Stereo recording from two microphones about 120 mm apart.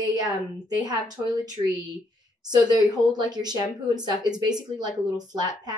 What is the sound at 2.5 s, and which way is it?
A woman's voice, 35° right (ahead or behind).